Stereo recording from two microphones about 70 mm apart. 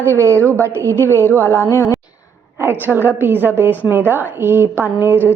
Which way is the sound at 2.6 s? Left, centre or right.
Right.